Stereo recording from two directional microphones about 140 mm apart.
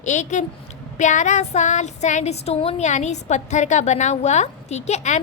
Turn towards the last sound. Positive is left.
turn(degrees=55)  # may be behind; listen again after turning